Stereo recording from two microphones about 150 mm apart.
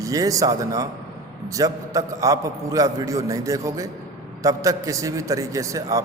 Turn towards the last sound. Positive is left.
turn(degrees=-20)  # may be behind; listen again after turning